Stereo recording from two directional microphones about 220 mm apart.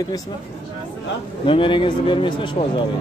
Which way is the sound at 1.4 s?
25° left (ahead or behind).